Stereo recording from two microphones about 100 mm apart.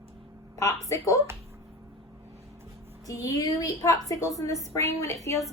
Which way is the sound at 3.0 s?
35° left (ahead or behind).